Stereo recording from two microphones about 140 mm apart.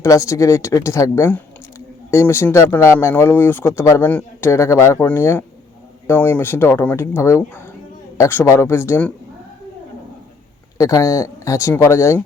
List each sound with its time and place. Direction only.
0.0 s speech: 20° left (ahead or behind)
10.8 s speech: 25° left (ahead or behind)